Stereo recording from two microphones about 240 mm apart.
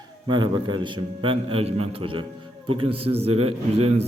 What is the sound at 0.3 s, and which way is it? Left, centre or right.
A man's voice, centre.